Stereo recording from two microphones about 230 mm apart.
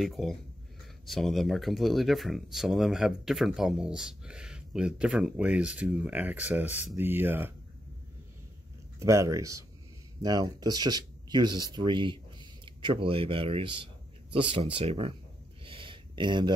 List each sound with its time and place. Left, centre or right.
0.0 s speech: centre
9.0 s speech: centre
15.6 s a sound: right